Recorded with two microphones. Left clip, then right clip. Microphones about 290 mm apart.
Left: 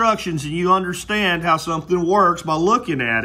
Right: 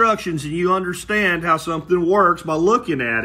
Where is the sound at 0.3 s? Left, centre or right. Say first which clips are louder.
Left 2 dB; centre.